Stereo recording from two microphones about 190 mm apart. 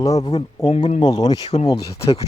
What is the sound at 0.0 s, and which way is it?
Speech, 20° left (ahead or behind).